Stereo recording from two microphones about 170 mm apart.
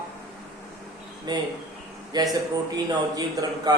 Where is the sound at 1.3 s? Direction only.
25° right (ahead or behind).